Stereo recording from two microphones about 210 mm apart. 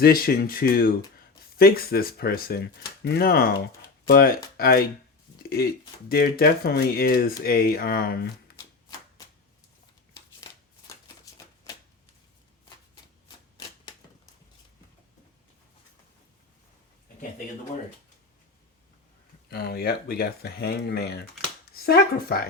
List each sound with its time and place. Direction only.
0.0 s speech: 45° left (ahead or behind)
13.2 s typewriter: 20° left (ahead or behind)
19.5 s speech: 45° left (ahead or behind)
21.7 s finger snapping: 45° left (ahead or behind)
22.3 s speech: 45° left (ahead or behind)